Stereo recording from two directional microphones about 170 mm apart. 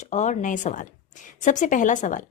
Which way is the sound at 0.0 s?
45° left (ahead or behind).